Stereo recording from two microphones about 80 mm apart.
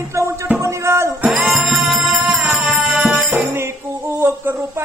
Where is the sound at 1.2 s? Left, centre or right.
Centre.